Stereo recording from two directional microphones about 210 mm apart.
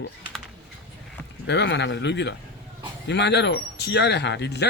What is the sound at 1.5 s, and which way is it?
Speech, 55° left (ahead or behind).